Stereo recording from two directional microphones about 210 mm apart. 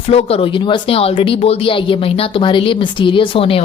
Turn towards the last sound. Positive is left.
turn(degrees=25)  # may be behind; listen again after turning